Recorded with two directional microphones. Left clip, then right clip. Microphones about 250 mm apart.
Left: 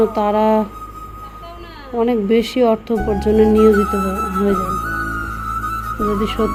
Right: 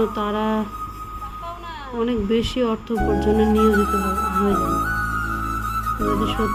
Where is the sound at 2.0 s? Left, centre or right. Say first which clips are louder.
Left 6 dB; centre.